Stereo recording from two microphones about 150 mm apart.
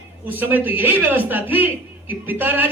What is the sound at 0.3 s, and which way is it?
A man's voice, 15° right (ahead or behind).